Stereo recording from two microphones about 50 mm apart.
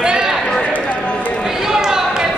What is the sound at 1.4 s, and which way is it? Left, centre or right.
Basketball bounce, centre.